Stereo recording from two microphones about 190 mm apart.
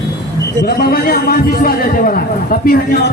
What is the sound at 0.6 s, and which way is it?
Speech, 55° left (ahead or behind).